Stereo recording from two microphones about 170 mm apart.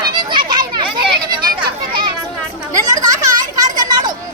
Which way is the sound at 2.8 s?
20° right (ahead or behind).